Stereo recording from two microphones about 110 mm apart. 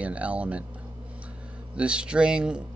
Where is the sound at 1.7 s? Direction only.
10° right (ahead or behind).